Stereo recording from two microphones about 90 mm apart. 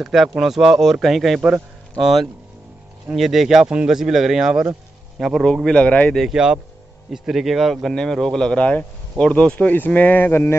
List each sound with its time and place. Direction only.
0.0 s speech: 5° right (ahead or behind); by 6.1 s 15° left (ahead or behind)
6.1 s speech: 5° right (ahead or behind); by 10.5 s 20° left (ahead or behind)